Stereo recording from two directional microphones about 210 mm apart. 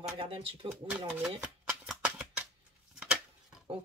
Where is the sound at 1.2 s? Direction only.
5° right (ahead or behind).